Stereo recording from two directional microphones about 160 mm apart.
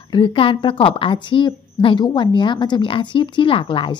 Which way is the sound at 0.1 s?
30° left (ahead or behind).